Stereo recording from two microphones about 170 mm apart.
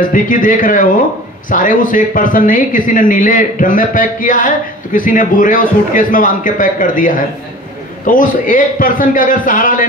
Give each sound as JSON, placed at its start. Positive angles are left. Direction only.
{"t": 0.0, "sound": "speech", "side_deg": 55}